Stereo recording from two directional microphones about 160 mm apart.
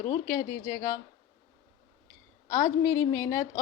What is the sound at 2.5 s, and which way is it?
A woman's voice, 15° left (ahead or behind).